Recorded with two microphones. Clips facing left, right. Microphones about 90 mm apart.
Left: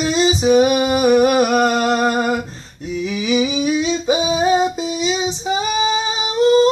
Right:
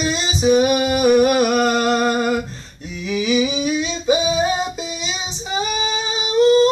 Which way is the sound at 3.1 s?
20° left (ahead or behind).